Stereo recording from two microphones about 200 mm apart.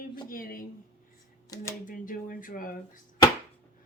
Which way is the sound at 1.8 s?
45° left (ahead or behind).